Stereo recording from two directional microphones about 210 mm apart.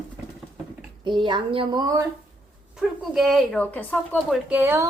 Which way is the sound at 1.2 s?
20° right (ahead or behind).